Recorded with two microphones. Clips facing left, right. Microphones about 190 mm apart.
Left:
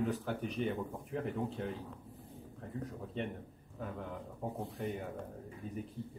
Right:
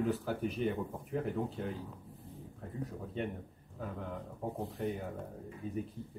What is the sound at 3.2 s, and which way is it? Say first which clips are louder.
Speech: right 2 dB; centre (ahead or behind).